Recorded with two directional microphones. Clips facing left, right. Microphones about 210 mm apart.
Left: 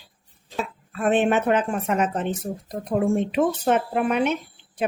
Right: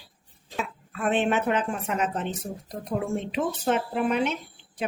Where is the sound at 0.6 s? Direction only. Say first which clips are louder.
Left 3 dB; 40° left (ahead or behind).